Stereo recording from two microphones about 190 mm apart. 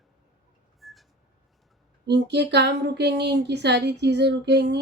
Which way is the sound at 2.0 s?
65° right (ahead or behind).